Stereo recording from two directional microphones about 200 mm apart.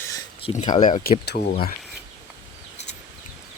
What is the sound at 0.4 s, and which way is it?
Speech, 25° left (ahead or behind).